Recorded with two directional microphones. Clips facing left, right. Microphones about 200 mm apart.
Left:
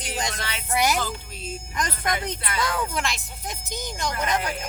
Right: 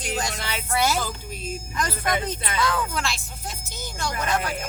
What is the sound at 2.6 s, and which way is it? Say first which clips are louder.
Speech: right 1 dB; 20° left (ahead or behind).